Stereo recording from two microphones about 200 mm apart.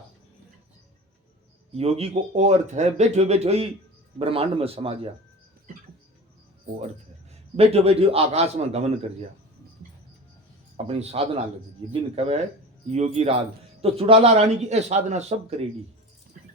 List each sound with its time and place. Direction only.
1.7 s a man's voice: 30° right (ahead or behind)
7.5 s speech: 30° right (ahead or behind)
10.8 s speech: 30° right (ahead or behind)